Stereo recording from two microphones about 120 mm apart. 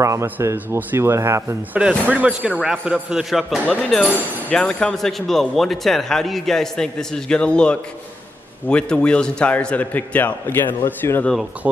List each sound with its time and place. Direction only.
0.0 s speech: 25° right (ahead or behind)
1.8 s a man's voice: 10° right (ahead or behind); by 11.3 s 15° left (ahead or behind)
11.6 s speech: 10° right (ahead or behind)